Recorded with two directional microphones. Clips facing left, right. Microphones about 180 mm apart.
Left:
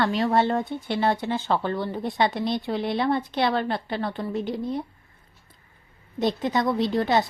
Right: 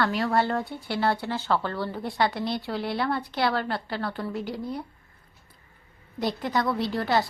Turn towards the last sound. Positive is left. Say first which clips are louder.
# left 3 dB
turn(degrees=20)  # may be behind; listen again after turning